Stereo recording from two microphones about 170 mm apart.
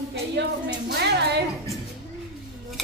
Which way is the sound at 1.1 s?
80° right.